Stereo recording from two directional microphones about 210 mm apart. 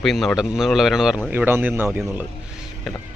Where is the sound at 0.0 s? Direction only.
Centre (ahead or behind).